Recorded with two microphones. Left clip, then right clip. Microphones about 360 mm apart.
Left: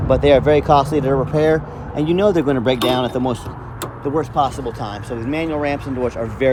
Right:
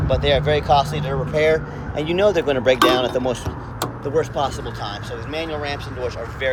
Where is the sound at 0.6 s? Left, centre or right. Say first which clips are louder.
Left 3 dB; left.